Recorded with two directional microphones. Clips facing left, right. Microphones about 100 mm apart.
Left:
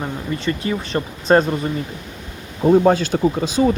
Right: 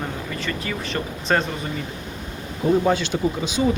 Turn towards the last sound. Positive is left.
turn(degrees=40)  # may be behind; listen again after turning